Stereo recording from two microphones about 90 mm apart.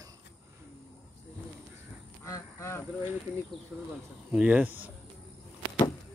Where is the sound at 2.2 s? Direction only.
35° left (ahead or behind).